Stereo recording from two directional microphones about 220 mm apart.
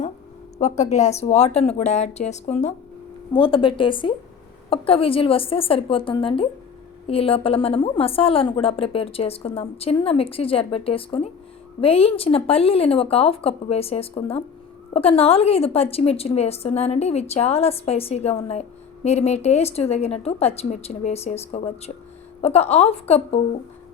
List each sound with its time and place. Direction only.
0.6 s a woman's voice: 30° left (ahead or behind)